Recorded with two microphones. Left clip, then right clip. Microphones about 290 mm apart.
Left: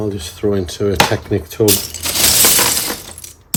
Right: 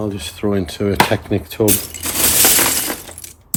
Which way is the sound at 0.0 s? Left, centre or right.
Centre.